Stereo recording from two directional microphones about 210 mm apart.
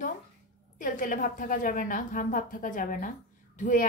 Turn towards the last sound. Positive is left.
turn(degrees=40)  # may be behind; listen again after turning